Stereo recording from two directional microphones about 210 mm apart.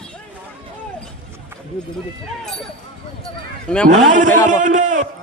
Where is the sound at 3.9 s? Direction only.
35° right (ahead or behind).